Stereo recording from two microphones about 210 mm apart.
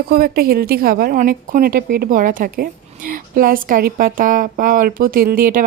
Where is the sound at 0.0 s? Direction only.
45° right (ahead or behind).